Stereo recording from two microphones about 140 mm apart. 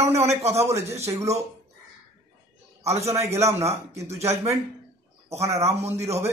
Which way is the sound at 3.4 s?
50° right (ahead or behind).